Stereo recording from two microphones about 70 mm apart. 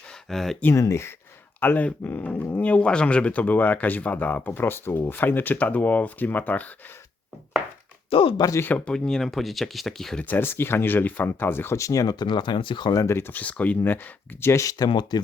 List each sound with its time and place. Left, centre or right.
0.3 s speech: centre
0.7 s speech: left
1.6 s speech: left
8.4 s speech: left
8.9 s speech: centre
10.2 s speech: left
11.8 s speech: left
12.0 s speech: left
13.1 s speech: left
13.3 s speech: left
14.5 s speech: left